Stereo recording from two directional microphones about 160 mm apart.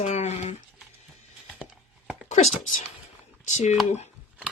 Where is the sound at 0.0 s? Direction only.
45° left (ahead or behind).